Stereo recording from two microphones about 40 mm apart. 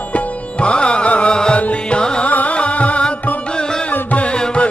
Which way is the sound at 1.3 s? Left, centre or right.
Centre.